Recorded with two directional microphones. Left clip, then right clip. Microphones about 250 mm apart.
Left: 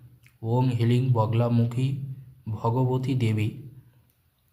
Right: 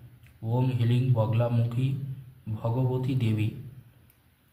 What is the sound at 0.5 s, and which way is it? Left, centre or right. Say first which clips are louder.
Speech: left 4 dB; left.